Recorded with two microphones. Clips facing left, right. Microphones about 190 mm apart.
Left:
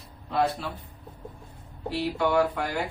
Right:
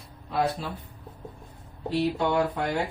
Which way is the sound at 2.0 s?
25° right (ahead or behind).